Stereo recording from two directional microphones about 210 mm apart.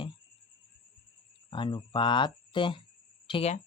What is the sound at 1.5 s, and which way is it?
Speech, 20° left (ahead or behind).